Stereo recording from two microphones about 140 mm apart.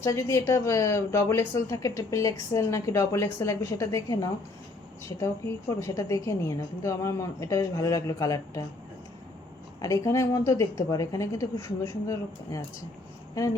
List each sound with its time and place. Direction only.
0.0 s speech: 20° left (ahead or behind)
9.8 s speech: 25° left (ahead or behind)